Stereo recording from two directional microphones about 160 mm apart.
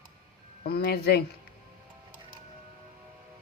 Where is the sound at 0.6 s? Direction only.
80° left.